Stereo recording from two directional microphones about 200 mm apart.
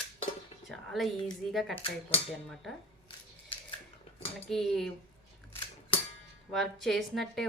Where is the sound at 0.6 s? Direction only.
Centre (ahead or behind).